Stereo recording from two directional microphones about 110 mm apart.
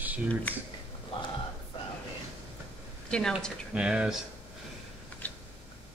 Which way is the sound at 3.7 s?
10° right (ahead or behind).